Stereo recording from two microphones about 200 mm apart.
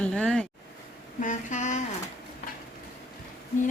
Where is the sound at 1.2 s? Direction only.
40° left (ahead or behind).